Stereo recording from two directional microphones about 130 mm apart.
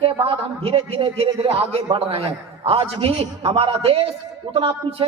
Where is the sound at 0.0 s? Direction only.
45° right (ahead or behind).